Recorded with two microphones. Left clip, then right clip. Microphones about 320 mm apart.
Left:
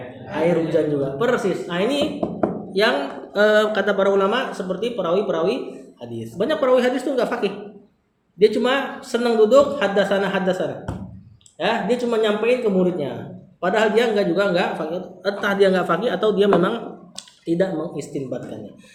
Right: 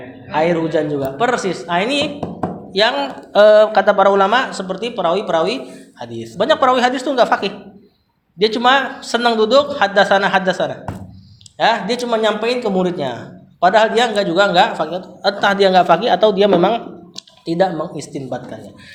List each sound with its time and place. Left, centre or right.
0.3 s a man's voice: right
3.3 s speech: centre
4.1 s a man's voice: right